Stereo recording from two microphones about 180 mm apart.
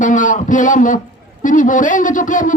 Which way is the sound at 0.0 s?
45° left (ahead or behind).